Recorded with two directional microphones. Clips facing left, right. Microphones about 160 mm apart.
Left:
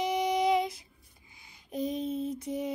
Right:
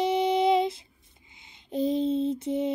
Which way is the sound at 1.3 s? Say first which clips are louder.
Right 6 dB; 25° right (ahead or behind).